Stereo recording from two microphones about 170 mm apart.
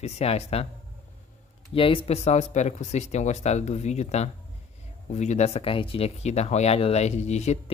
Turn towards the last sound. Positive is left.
turn(degrees=40)  # may be behind; listen again after turning